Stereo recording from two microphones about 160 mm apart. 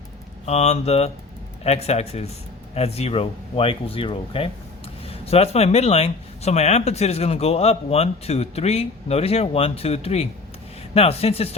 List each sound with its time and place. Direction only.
0.4 s speech: 40° left (ahead or behind)